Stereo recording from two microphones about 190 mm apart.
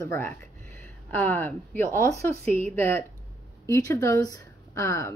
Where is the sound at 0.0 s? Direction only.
10° left (ahead or behind).